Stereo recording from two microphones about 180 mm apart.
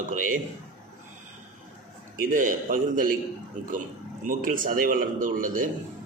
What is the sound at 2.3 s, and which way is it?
Speech, 50° right (ahead or behind).